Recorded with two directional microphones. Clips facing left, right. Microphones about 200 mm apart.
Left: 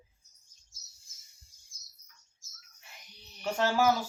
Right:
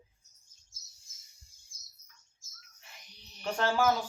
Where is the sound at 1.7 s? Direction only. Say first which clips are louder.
Even; 50° right (ahead or behind).